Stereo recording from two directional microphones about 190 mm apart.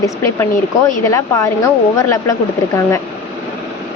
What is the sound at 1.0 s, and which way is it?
Speech, 15° left (ahead or behind).